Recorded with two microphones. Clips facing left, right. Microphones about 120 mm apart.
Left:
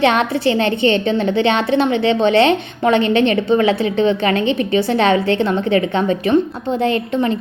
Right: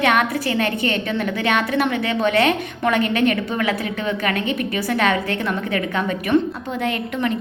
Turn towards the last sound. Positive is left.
turn(degrees=30)  # may be behind; listen again after turning